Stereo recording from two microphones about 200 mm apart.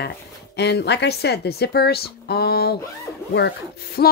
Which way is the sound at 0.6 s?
55° left (ahead or behind).